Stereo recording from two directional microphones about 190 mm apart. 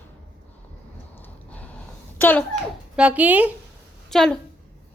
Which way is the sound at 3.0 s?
5° right (ahead or behind).